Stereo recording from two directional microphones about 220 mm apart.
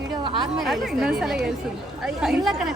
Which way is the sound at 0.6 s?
Centre (ahead or behind).